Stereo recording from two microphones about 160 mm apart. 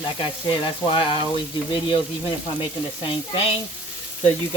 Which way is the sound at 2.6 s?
30° left (ahead or behind).